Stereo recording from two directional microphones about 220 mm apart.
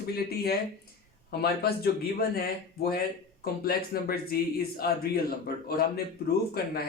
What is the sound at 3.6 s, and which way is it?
Speech, 45° left (ahead or behind).